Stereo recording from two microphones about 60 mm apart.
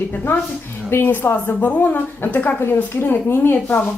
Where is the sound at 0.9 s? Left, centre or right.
Left.